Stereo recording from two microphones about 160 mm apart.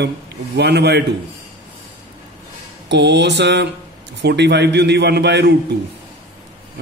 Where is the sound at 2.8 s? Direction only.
90° right.